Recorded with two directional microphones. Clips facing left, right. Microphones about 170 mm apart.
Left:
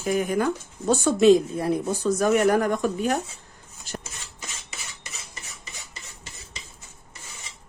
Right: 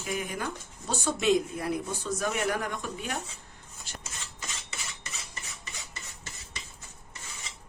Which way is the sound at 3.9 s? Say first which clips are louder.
Left 10 dB; 40° left (ahead or behind).